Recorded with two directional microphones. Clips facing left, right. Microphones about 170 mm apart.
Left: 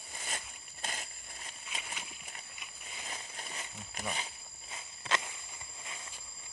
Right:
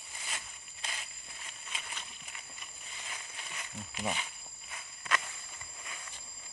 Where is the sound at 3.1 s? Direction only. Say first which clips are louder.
Left 2 dB; 35° left (ahead or behind).